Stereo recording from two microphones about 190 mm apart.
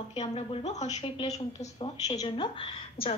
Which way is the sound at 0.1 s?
30° left (ahead or behind).